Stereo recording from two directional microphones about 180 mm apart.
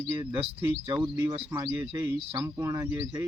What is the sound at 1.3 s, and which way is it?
Speech, 20° right (ahead or behind).